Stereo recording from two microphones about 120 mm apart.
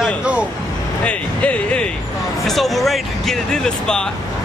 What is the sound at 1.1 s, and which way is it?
Speech, 10° left (ahead or behind).